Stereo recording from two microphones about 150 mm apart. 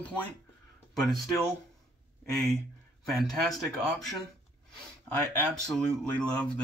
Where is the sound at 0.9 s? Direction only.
Centre (ahead or behind).